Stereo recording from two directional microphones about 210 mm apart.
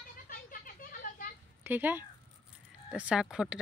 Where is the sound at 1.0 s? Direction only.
40° left (ahead or behind).